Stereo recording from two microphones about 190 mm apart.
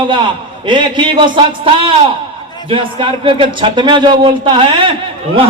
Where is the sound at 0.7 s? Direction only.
25° right (ahead or behind).